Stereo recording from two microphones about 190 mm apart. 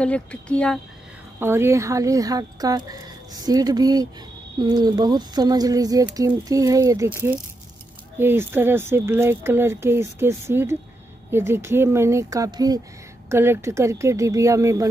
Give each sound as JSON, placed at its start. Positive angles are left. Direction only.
{"t": 0.0, "sound": "speech", "side_deg": 5}
{"t": 1.4, "sound": "speech", "side_deg": -15}